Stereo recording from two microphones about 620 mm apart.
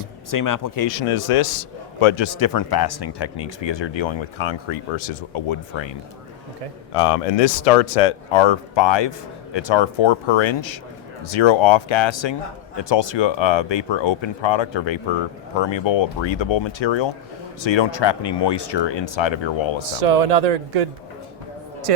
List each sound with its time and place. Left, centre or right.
0.3 s speech: left
0.9 s a man's voice: left
6.9 s a man's voice: left
20.0 s speech: right
21.9 s a woman's voice: right